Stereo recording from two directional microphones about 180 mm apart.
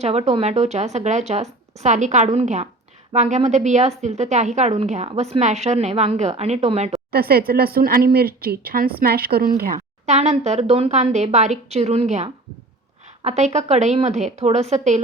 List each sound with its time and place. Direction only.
0.0 s a woman's voice: 35° right (ahead or behind)
7.1 s a woman's voice: 60° right (ahead or behind); by 15.0 s 40° right (ahead or behind)